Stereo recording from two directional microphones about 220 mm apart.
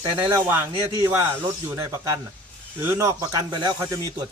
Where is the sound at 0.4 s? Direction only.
10° right (ahead or behind).